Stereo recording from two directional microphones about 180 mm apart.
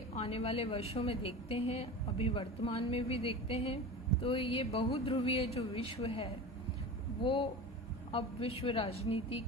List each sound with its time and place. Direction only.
0.2 s a woman's voice: 35° left (ahead or behind)
7.3 s a woman's voice: 30° left (ahead or behind)